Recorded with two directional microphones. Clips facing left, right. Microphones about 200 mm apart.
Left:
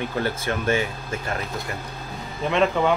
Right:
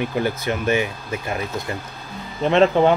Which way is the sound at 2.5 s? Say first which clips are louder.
Right 6 dB; 30° right (ahead or behind).